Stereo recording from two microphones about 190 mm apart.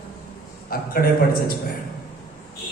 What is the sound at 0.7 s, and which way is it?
Speech, 50° left (ahead or behind).